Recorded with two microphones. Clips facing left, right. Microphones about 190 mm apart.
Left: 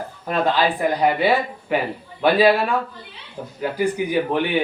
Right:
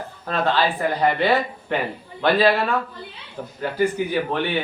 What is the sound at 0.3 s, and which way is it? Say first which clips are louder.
Speech: left 2 dB; 15° left (ahead or behind).